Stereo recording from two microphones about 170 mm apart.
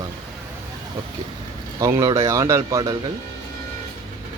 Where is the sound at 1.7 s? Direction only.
20° right (ahead or behind).